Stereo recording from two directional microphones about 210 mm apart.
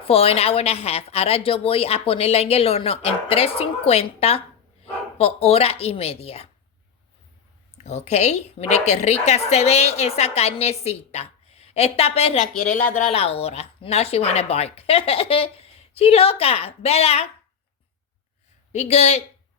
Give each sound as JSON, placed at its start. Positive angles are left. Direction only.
{"t": 0.0, "sound": "a woman's voice", "side_deg": 30}
{"t": 7.9, "sound": "a woman's voice", "side_deg": 30}
{"t": 18.7, "sound": "a woman's voice", "side_deg": 30}